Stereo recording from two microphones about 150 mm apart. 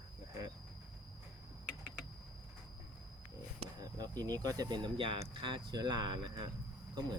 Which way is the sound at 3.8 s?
25° right (ahead or behind).